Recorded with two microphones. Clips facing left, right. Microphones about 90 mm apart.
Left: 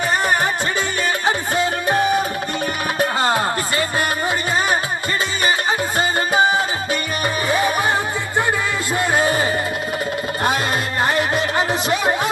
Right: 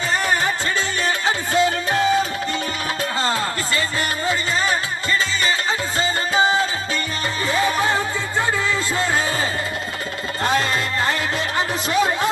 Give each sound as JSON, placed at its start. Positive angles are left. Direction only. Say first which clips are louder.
{"t": 1.2, "sound": "music", "louder": "right 2 dB", "side_deg": 20}
{"t": 6.0, "sound": "music", "louder": "left 2 dB", "side_deg": 15}
{"t": 9.1, "sound": "music", "louder": "left 4 dB", "side_deg": 20}
{"t": 11.0, "sound": "music", "louder": "left 4 dB", "side_deg": 20}